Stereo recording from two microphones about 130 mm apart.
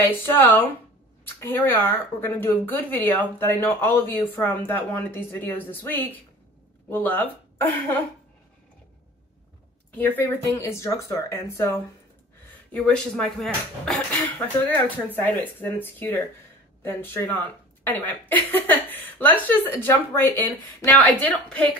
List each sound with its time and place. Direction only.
0.2 s speech: 15° left (ahead or behind)
9.9 s speech: 15° left (ahead or behind)
12.7 s speech: 5° left (ahead or behind)